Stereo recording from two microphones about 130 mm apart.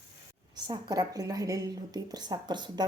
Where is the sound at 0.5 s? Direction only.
30° right (ahead or behind).